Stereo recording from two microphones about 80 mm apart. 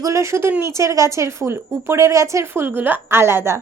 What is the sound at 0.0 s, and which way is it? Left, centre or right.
A woman's voice, right.